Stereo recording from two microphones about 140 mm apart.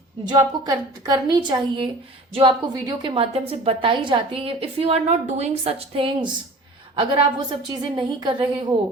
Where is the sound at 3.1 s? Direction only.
45° right (ahead or behind).